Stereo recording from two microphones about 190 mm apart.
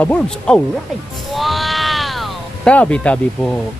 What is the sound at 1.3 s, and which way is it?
Music, centre (ahead or behind).